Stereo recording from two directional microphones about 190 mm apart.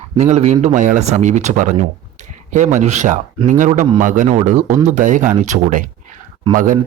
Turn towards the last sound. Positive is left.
turn(degrees=-45)  # may be behind; listen again after turning